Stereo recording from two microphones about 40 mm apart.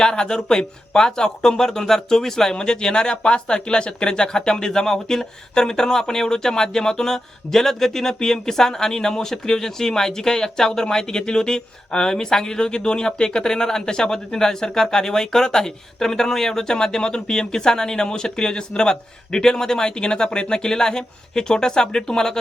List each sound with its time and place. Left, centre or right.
0.0 s speech: centre